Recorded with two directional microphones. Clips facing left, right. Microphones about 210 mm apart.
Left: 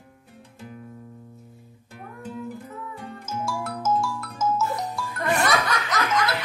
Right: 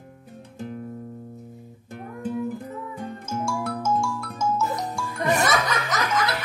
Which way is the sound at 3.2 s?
Centre (ahead or behind).